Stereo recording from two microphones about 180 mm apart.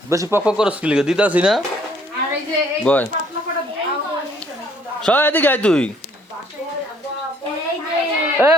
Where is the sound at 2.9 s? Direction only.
5° left (ahead or behind).